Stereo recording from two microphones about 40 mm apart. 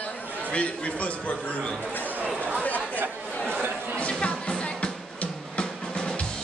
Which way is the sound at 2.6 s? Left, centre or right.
Left.